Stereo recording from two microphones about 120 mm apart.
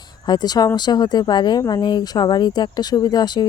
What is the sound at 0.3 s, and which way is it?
Speech, 35° left (ahead or behind).